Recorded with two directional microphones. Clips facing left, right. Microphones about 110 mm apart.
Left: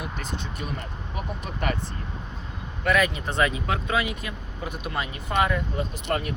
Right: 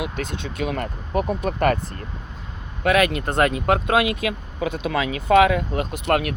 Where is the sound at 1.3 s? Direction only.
55° right (ahead or behind).